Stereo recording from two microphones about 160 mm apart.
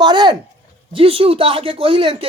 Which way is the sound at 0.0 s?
30° right (ahead or behind).